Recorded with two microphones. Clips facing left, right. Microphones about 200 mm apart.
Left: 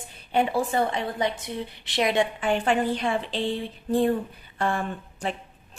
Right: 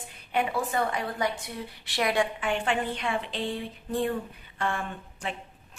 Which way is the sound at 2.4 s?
35° left (ahead or behind).